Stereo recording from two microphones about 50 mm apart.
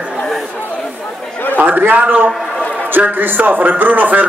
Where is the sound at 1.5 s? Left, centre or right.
Right.